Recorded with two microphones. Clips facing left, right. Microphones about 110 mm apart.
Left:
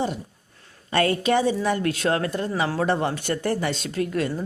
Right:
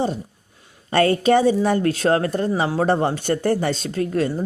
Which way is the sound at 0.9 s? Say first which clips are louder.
Right 5 dB; 35° right (ahead or behind).